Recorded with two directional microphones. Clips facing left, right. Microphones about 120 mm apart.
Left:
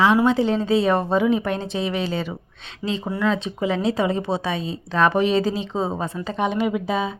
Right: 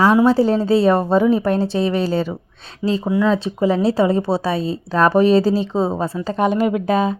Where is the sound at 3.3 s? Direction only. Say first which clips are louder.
Right 6 dB; 35° right (ahead or behind).